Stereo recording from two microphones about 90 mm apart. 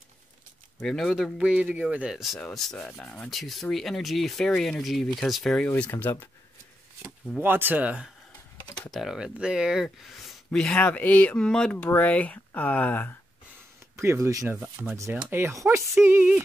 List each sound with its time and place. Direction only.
0.7 s speech: 5° left (ahead or behind)
3.3 s speech: centre (ahead or behind)
5.7 s speech: 20° left (ahead or behind)
7.4 s speech: 20° right (ahead or behind); by 13.1 s 20° left (ahead or behind)
13.9 s speech: 30° right (ahead or behind)
14.6 s speech: 20° right (ahead or behind)
15.5 s speech: 30° right (ahead or behind)